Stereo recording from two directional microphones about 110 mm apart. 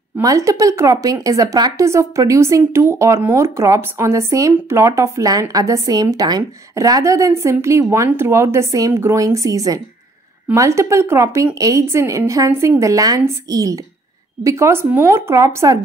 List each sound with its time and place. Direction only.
0.2 s speech: 30° right (ahead or behind)